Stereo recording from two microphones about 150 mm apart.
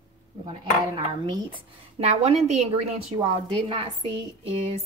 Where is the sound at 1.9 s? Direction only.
45° right (ahead or behind).